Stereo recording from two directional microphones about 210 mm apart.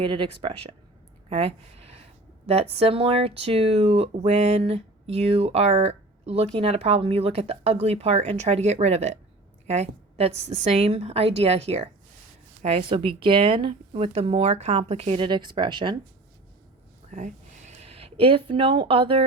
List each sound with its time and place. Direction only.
0.0 s speech: 25° right (ahead or behind)
1.3 s a sound: 30° right (ahead or behind)
2.5 s speech: 30° right (ahead or behind)
17.1 s speech: 35° right (ahead or behind)